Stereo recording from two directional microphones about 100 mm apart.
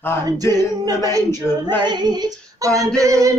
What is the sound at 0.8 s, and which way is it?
Music, 35° right (ahead or behind).